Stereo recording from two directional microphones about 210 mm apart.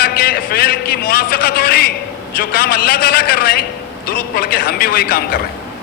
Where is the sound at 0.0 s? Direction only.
45° left (ahead or behind).